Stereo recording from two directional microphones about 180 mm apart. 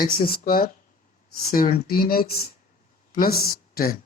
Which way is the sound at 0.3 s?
55° left (ahead or behind).